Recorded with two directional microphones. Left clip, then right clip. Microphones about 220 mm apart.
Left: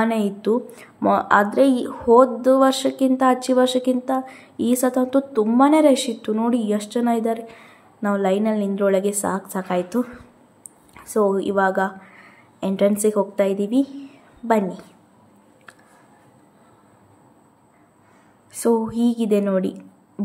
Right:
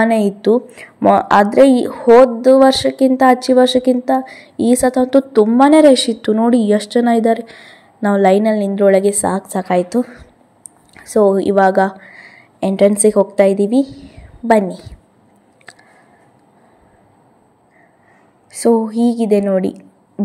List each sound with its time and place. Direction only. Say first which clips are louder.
0.0 s a woman's voice: right 8 dB; 20° right (ahead or behind)
15.7 s a sound: right 6 dB; 20° right (ahead or behind)
18.5 s speech: right 6 dB; 15° right (ahead or behind)